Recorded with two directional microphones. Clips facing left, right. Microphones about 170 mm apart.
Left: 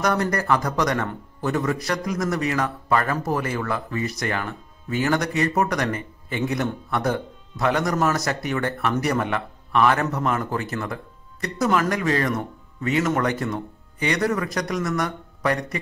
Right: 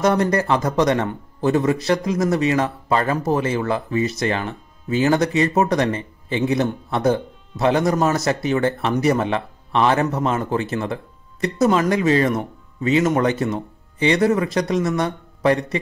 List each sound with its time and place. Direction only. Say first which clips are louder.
0.0 s a man's voice: right 5 dB; 25° right (ahead or behind)